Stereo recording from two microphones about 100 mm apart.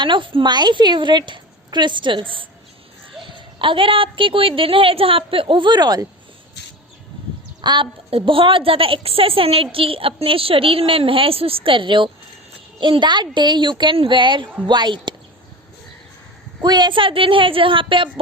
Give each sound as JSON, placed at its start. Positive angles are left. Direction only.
{"t": 0.0, "sound": "a woman's voice", "side_deg": -55}
{"t": 7.6, "sound": "a woman's voice", "side_deg": -50}
{"t": 8.1, "sound": "a woman's voice", "side_deg": -60}
{"t": 16.6, "sound": "a woman's voice", "side_deg": -45}